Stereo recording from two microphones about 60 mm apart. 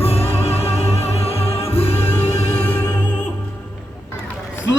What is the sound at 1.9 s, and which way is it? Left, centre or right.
Music, left.